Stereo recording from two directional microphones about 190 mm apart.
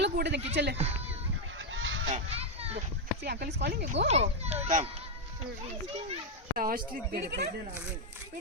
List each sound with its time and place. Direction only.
0.0 s a sound: 65° right (ahead or behind)
0.5 s speech: 60° right (ahead or behind)
1.7 s goose: 90° right
2.0 s children playing: 35° right (ahead or behind)
3.2 s speech: 60° right (ahead or behind)
4.1 s a child's voice: 35° right (ahead or behind)
6.6 s speech: 50° right (ahead or behind)